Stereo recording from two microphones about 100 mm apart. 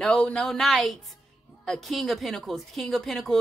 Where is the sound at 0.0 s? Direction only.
10° left (ahead or behind).